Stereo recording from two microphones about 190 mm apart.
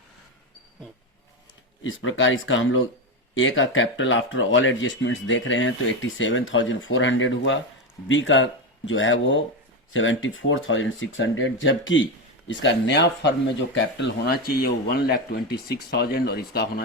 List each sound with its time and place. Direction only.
1.8 s speech: 85° left
12.5 s speech: 75° left (ahead or behind); by 16.8 s 55° left (ahead or behind)